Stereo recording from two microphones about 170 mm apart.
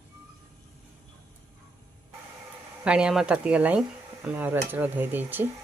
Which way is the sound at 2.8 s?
5° right (ahead or behind).